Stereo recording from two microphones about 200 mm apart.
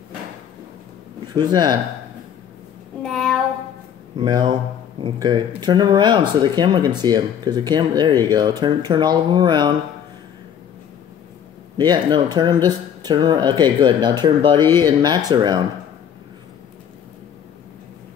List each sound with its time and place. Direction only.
1.3 s speech: 20° right (ahead or behind)
4.2 s speech: 20° right (ahead or behind)
11.7 s speech: 20° right (ahead or behind)